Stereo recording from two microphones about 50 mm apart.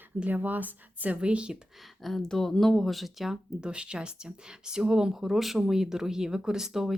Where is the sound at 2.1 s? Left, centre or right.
Centre.